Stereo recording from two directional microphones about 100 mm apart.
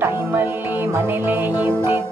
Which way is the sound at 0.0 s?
20° right (ahead or behind).